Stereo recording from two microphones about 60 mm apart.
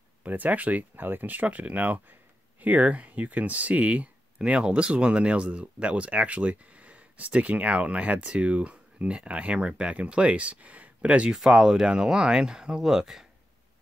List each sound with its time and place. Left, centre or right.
0.2 s speech: right; by 13.3 s centre